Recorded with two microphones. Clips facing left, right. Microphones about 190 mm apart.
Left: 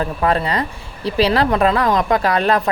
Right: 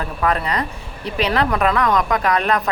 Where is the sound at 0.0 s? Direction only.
30° left (ahead or behind).